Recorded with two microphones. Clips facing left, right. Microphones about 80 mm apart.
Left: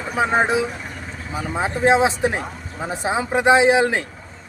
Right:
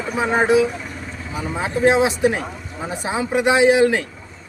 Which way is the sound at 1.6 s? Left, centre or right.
Left.